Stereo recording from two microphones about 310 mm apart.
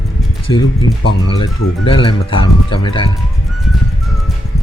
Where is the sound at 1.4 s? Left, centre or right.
Centre.